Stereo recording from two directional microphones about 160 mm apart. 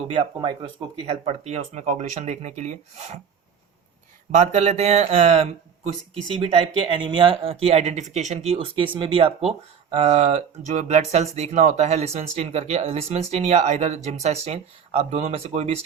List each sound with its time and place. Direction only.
0.0 s speech: 35° right (ahead or behind)
4.3 s speech: 50° right (ahead or behind)
6.8 s speech: 30° right (ahead or behind)